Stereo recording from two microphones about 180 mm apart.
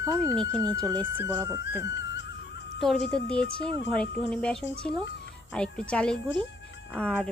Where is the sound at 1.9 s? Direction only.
85° left.